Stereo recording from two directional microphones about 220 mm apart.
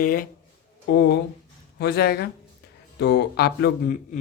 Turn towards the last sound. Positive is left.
turn(degrees=40)  # may be behind; listen again after turning